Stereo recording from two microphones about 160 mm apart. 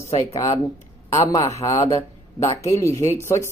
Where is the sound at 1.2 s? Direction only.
20° left (ahead or behind).